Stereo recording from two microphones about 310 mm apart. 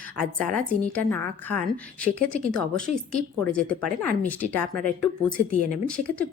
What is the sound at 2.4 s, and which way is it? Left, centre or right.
Speech, right.